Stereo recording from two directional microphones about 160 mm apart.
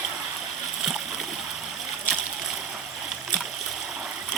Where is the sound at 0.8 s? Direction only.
5° right (ahead or behind).